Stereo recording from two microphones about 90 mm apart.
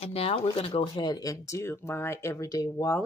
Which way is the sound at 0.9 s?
50° left (ahead or behind).